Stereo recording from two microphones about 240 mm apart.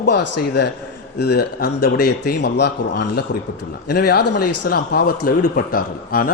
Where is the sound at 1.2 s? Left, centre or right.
Left.